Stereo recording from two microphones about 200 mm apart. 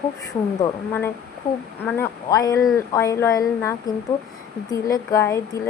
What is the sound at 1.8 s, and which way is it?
Speech, 10° left (ahead or behind).